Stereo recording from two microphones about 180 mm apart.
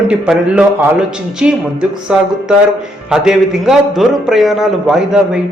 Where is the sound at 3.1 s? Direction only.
5° right (ahead or behind).